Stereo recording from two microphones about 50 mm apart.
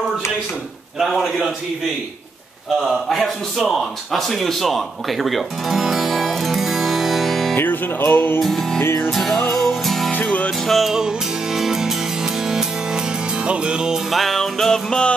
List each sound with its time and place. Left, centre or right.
0.9 s music: centre
2.8 s speech: centre
7.5 s music: left
8.4 s music: centre
8.8 s music: left
9.1 s music: centre
10.2 s music: left
10.7 s music: centre
14.1 s music: centre